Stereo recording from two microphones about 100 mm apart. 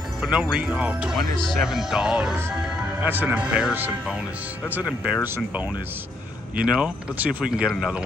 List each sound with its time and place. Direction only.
0.2 s speech: 10° right (ahead or behind)
1.3 s speech: 5° left (ahead or behind)
1.6 s speech: 5° right (ahead or behind)
6.5 s speech: 10° right (ahead or behind)